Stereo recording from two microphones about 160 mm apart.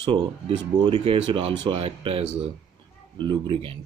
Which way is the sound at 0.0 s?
30° right (ahead or behind).